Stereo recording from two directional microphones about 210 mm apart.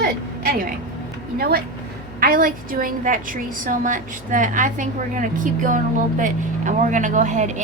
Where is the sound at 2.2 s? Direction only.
45° right (ahead or behind).